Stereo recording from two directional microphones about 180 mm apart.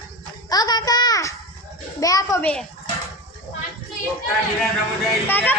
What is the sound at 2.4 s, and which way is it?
Speech, 5° left (ahead or behind).